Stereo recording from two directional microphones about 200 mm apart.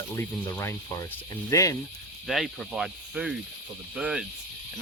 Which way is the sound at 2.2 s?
Centre (ahead or behind).